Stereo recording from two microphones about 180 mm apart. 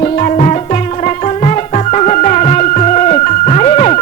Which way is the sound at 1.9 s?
40° left (ahead or behind).